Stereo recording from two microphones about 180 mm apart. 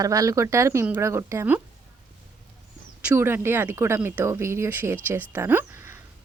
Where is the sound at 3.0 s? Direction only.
10° right (ahead or behind).